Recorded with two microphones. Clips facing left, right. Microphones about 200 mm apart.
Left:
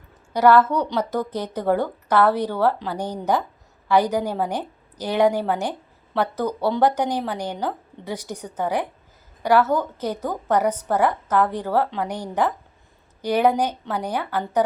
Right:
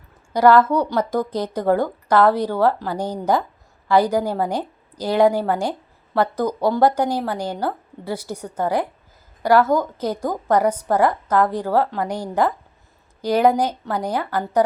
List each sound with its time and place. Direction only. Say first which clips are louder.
0.5 s a woman's voice: right 2 dB; 10° right (ahead or behind)